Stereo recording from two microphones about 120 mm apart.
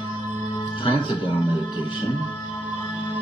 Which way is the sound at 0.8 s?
45° left (ahead or behind).